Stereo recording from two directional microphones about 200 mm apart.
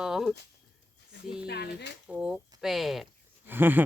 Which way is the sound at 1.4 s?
55° left (ahead or behind).